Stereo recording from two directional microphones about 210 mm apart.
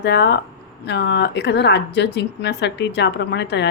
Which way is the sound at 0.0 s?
55° left (ahead or behind).